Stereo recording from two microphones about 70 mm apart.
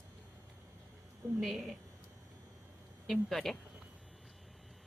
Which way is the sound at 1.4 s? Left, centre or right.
Centre.